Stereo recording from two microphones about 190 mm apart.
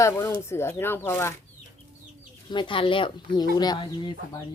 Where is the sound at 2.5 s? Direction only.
25° left (ahead or behind).